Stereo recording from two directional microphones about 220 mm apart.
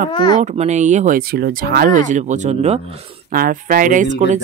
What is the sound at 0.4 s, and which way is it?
Speech, 30° right (ahead or behind).